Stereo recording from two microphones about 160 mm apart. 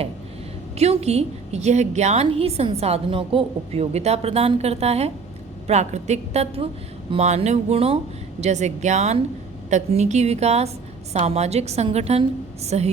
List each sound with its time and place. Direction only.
0.8 s a woman's voice: 40° right (ahead or behind)